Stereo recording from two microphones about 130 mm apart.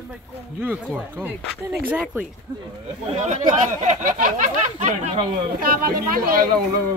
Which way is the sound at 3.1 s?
70° right (ahead or behind).